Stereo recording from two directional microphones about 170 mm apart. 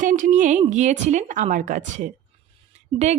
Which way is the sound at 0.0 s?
50° right (ahead or behind).